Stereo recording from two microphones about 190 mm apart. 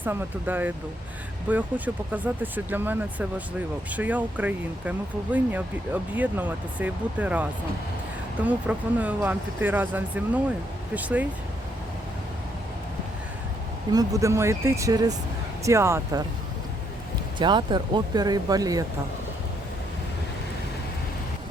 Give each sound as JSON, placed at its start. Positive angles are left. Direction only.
{"t": 0.0, "sound": "speech", "side_deg": -10}
{"t": 13.9, "sound": "speech", "side_deg": -20}
{"t": 17.3, "sound": "speech", "side_deg": -25}